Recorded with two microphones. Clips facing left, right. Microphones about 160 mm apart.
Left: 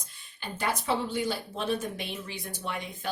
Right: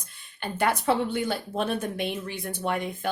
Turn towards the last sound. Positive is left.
turn(degrees=-55)  # may be behind; listen again after turning